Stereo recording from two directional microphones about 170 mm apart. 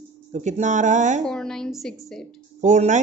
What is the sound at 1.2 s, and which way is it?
A woman's voice, 5° left (ahead or behind).